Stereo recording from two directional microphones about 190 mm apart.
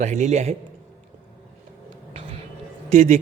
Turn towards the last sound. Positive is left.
turn(degrees=-35)  # may be behind; listen again after turning